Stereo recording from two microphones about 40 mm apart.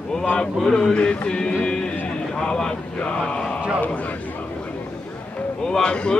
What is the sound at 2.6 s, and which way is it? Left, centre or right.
Speech, left.